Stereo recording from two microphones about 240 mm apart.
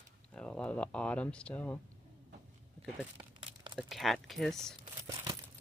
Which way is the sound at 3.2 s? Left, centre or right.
Centre.